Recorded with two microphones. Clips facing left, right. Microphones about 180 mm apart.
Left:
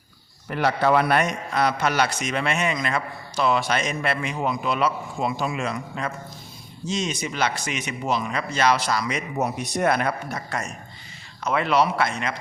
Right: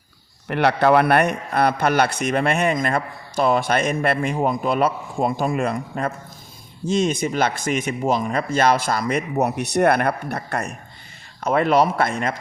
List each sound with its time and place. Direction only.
0.4 s a man's voice: 65° right (ahead or behind)
11.4 s speech: 50° right (ahead or behind)